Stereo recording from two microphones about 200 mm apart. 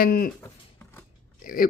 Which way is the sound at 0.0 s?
45° left (ahead or behind).